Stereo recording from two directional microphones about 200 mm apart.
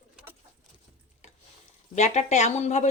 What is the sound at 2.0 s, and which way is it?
Speech, 35° left (ahead or behind).